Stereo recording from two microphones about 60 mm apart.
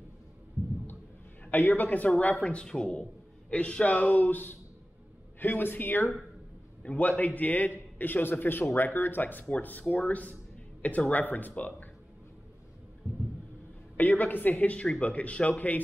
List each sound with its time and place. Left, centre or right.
1.4 s a man's voice: left
6.8 s a man's voice: left
13.0 s a sound: right
13.9 s a man's voice: left